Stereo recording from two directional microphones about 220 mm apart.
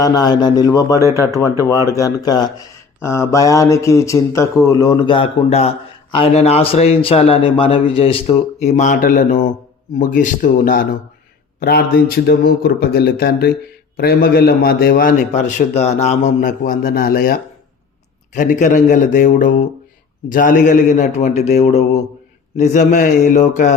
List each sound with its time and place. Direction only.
0.0 s speech: 20° left (ahead or behind)
1.0 s speech: 15° right (ahead or behind)
1.9 s a man's voice: 15° left (ahead or behind); by 23.7 s 35° left (ahead or behind)